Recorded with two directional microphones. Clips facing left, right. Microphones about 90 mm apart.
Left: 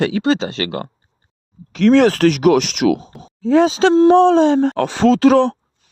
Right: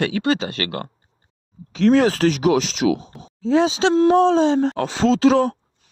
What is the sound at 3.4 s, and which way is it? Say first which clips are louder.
Speech: left 4 dB; 50° left (ahead or behind).